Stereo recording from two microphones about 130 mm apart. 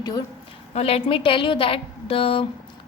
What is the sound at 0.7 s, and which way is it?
A woman's voice, 50° left (ahead or behind).